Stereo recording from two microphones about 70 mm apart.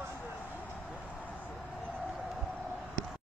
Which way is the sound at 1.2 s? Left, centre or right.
Left.